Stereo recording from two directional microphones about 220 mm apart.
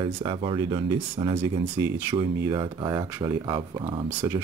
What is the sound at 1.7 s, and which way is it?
Speech, 10° right (ahead or behind).